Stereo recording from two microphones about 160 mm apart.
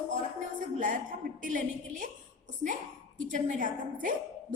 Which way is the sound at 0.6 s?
60° right (ahead or behind).